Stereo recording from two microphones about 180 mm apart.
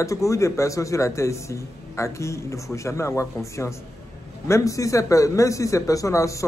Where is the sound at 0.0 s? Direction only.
15° left (ahead or behind).